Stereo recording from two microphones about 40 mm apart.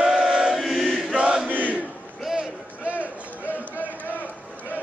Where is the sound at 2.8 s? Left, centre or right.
Right.